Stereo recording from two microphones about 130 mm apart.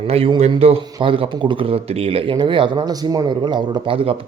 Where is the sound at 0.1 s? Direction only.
50° right (ahead or behind).